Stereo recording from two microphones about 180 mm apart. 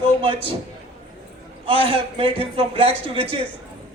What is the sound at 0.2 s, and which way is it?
Speech, 30° right (ahead or behind).